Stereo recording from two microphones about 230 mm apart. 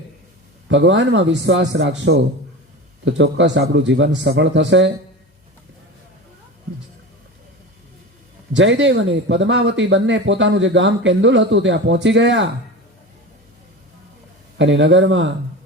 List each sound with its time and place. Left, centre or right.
0.7 s speech: right
8.5 s speech: right
14.6 s speech: right